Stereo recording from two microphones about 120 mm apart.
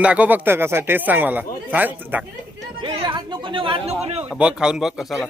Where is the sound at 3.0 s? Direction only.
40° right (ahead or behind); by 4.2 s 55° right (ahead or behind).